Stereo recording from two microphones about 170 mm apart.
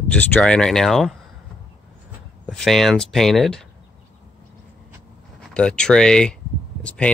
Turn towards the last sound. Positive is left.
turn(degrees=5)  # may be behind; listen again after turning